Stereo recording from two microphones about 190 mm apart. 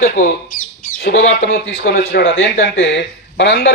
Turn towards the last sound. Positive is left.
turn(degrees=65)  # may be behind; listen again after turning